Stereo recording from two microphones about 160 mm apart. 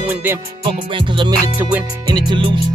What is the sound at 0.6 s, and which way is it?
Music, 30° right (ahead or behind).